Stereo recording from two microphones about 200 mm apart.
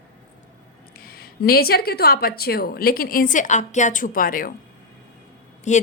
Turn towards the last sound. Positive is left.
turn(degrees=35)  # may be behind; listen again after turning